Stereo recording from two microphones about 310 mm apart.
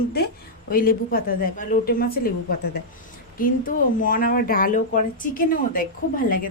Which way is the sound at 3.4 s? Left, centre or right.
Left.